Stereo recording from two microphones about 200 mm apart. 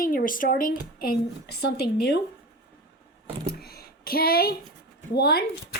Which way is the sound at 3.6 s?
50° left (ahead or behind).